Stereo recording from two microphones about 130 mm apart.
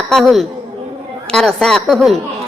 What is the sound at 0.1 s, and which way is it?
A woman's voice, centre (ahead or behind).